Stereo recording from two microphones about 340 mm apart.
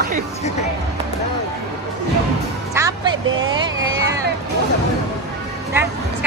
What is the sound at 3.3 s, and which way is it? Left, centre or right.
Speech, right.